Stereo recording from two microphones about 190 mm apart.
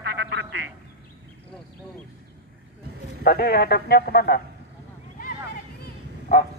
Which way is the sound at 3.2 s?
55° left (ahead or behind).